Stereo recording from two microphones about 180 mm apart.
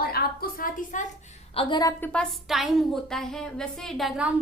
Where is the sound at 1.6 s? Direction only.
25° left (ahead or behind).